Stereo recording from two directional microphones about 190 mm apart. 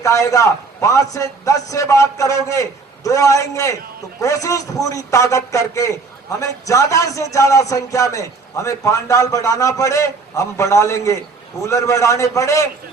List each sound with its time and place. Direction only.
0.0 s a man's voice: 15° left (ahead or behind)